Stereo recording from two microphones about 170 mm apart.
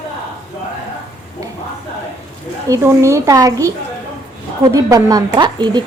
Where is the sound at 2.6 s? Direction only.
15° right (ahead or behind).